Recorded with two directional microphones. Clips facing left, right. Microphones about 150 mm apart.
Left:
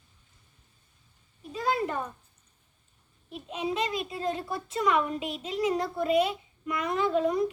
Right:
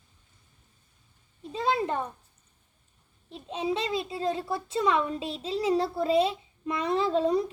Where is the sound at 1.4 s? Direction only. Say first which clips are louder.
Right 1 dB; 25° right (ahead or behind).